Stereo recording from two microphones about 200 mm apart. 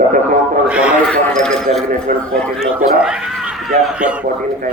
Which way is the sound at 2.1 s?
45° right (ahead or behind).